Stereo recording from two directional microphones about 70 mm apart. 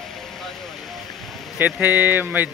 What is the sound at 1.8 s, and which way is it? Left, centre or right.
Speech, right.